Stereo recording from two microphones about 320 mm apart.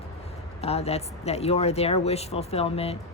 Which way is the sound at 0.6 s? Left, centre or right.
Centre.